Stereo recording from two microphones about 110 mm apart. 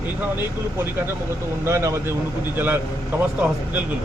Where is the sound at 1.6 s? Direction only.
25° right (ahead or behind).